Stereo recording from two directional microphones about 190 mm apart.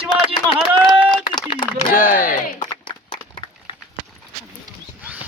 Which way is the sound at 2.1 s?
45° left (ahead or behind).